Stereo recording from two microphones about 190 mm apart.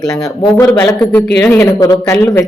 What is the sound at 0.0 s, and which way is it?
Speech, 5° left (ahead or behind).